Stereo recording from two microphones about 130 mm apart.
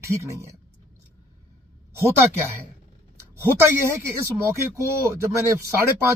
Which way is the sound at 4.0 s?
20° right (ahead or behind).